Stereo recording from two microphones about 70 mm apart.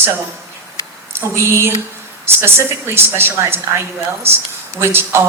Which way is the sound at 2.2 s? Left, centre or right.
Right.